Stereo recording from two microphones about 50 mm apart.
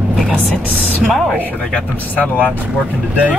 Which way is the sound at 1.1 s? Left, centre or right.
Centre.